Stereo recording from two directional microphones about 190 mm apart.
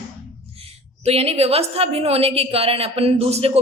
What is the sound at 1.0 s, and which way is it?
A woman's voice, 30° right (ahead or behind).